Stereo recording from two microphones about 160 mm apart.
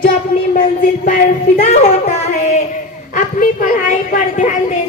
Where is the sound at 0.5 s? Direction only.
55° left (ahead or behind).